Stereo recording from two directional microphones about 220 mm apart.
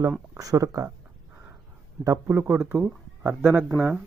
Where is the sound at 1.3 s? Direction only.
10° right (ahead or behind).